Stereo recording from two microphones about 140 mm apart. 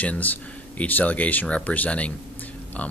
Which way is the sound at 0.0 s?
10° left (ahead or behind).